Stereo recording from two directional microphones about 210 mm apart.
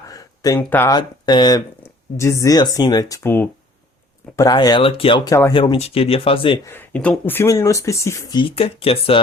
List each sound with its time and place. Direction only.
0.1 s speech: 15° left (ahead or behind)
5.7 s speech: 30° left (ahead or behind)
6.7 s speech: 10° left (ahead or behind); by 9.1 s 25° left (ahead or behind)